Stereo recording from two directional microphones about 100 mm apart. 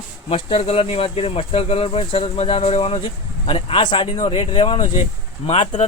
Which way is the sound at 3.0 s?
60° left (ahead or behind).